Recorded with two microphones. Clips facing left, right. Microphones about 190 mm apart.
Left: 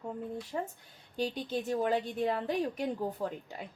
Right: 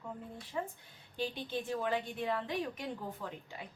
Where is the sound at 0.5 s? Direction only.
40° left (ahead or behind).